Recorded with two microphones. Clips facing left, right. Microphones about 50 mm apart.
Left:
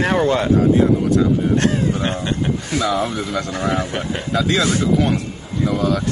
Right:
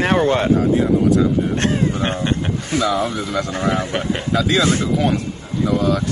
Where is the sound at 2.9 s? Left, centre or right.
Centre.